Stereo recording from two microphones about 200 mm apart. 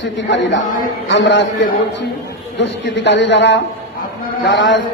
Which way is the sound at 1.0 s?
65° left (ahead or behind).